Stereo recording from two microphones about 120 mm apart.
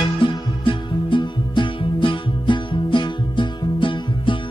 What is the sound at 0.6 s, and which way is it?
Music, 45° left (ahead or behind).